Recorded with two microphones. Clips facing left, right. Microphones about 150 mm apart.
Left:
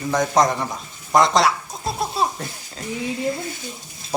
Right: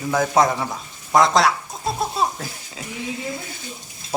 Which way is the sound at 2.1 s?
Centre (ahead or behind).